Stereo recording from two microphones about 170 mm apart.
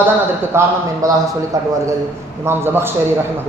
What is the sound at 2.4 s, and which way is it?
Speech, 15° right (ahead or behind).